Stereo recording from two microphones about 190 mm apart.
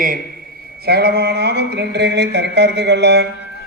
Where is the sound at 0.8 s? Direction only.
60° right (ahead or behind).